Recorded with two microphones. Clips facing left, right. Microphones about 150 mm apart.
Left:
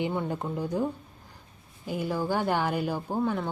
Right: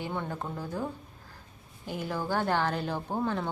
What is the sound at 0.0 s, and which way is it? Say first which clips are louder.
Speech: left 5 dB; 15° left (ahead or behind).